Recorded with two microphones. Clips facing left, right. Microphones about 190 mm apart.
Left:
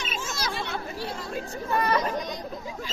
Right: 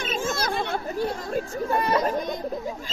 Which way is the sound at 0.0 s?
55° right (ahead or behind).